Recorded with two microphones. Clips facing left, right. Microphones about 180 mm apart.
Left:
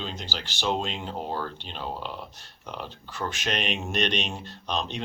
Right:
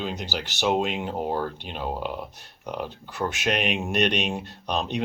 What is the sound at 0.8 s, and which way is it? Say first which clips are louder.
Speech: right 6 dB; 60° right (ahead or behind).